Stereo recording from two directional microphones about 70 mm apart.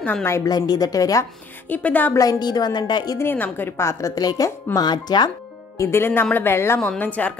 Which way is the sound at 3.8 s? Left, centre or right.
Left.